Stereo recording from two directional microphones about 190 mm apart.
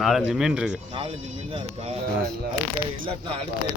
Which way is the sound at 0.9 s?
30° right (ahead or behind).